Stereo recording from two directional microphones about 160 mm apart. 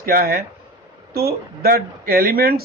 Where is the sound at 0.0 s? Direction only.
65° right (ahead or behind).